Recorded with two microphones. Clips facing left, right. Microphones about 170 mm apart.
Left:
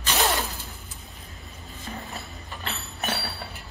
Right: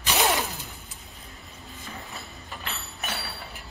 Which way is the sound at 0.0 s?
15° right (ahead or behind).